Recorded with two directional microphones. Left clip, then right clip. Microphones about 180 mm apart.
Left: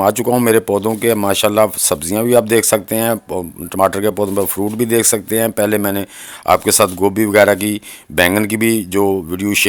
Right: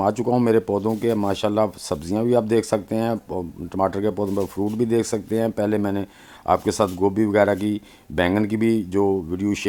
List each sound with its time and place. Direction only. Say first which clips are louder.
0.0 s speech: left 7 dB; 20° left (ahead or behind)